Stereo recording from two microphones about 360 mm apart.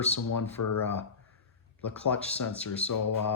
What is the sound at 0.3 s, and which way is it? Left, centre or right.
Speech, left.